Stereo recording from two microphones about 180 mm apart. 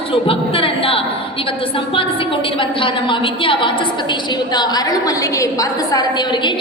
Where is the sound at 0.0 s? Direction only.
30° left (ahead or behind).